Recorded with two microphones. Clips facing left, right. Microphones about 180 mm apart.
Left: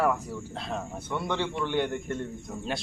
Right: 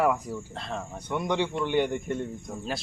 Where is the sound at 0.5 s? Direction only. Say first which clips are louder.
Left 4 dB; centre (ahead or behind).